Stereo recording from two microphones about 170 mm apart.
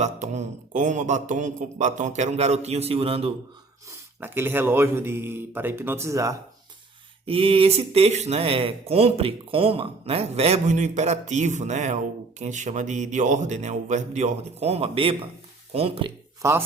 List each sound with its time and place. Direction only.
0.0 s a man's voice: 45° right (ahead or behind)
3.8 s speech: 15° right (ahead or behind)
7.3 s a man's voice: 35° right (ahead or behind)
16.4 s speech: 15° right (ahead or behind)